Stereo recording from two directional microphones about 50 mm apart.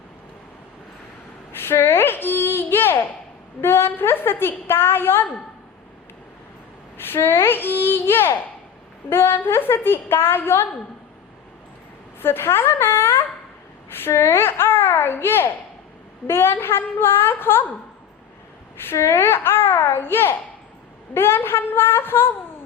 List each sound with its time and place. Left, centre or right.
1.5 s a sound: left
3.6 s a woman's voice: left
6.9 s a woman's voice: left
12.2 s a woman's voice: left
18.9 s a woman's voice: left